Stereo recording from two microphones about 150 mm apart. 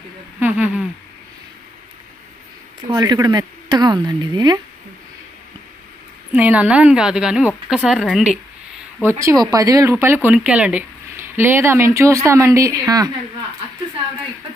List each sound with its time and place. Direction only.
0.4 s a sound: 10° right (ahead or behind)
2.8 s speech: 25° right (ahead or behind)
6.3 s speech: 10° right (ahead or behind)
9.0 s speech: 20° right (ahead or behind)